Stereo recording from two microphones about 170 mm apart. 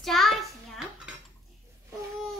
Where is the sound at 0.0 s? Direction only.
Centre (ahead or behind).